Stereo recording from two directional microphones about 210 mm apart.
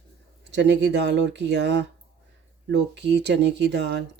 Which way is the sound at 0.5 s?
55° right (ahead or behind).